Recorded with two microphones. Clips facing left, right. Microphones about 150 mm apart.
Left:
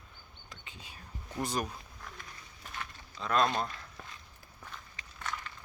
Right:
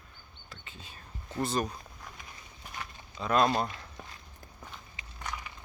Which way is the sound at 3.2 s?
5° right (ahead or behind).